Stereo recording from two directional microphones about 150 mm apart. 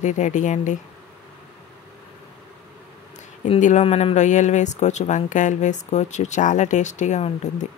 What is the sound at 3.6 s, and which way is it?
Speech, 50° left (ahead or behind).